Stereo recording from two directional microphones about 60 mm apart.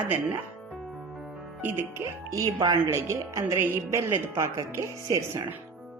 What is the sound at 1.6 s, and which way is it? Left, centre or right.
Speech, right.